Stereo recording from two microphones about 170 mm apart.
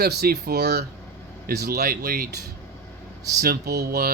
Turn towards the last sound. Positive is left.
turn(degrees=-65)  # may be behind; listen again after turning